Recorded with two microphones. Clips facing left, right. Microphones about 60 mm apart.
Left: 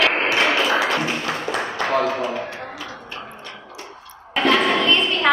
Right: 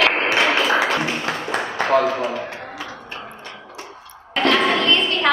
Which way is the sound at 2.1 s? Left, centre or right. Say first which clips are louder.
Even; centre.